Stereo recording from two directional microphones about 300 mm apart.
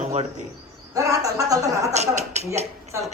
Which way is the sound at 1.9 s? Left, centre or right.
Right.